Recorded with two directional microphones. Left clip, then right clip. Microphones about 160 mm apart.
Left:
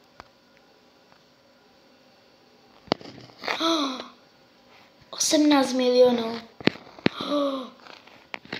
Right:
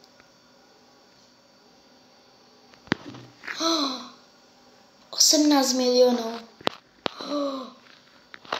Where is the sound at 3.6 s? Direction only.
15° right (ahead or behind).